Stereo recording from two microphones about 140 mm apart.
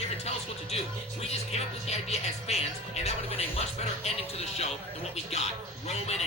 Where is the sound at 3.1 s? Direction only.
50° left (ahead or behind).